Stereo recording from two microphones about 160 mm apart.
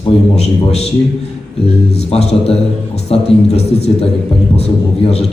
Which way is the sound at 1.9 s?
40° left (ahead or behind).